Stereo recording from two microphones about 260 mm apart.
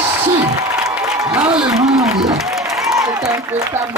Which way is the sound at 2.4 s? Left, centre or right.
Centre.